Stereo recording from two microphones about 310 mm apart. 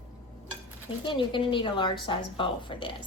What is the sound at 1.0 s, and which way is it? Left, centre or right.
A woman's voice, centre.